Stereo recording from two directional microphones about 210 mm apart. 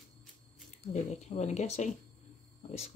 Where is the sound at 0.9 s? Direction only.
35° left (ahead or behind).